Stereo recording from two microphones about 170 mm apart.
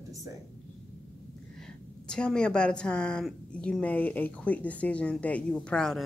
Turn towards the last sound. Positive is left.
turn(degrees=5)  # may be behind; listen again after turning